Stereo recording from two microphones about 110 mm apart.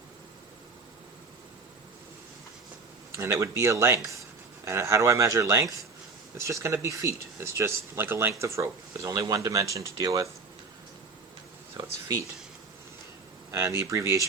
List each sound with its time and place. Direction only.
3.2 s speech: 25° right (ahead or behind)
11.8 s speech: 30° right (ahead or behind)
13.5 s speech: 25° right (ahead or behind)